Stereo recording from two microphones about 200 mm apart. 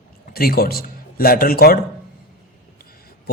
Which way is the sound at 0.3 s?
50° left (ahead or behind).